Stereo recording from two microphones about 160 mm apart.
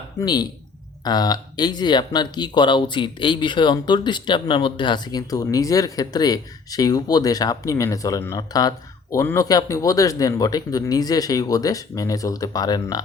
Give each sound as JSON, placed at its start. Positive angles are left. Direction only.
{"t": 0.2, "sound": "speech", "side_deg": 25}